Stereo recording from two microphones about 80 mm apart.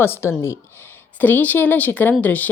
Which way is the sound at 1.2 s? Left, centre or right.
Left.